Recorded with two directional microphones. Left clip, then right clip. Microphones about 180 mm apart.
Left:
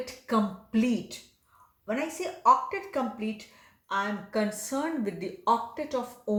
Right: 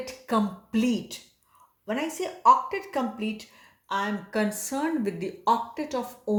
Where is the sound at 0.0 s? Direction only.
30° right (ahead or behind).